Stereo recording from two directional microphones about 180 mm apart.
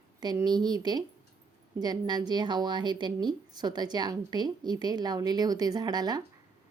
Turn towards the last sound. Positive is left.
turn(degrees=-20)  # may be behind; listen again after turning